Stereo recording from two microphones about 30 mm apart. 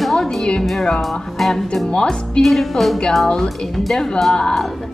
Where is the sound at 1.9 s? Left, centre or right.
Left.